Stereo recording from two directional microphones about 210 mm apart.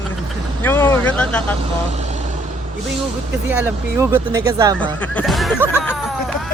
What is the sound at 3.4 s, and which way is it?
Speech, 10° right (ahead or behind).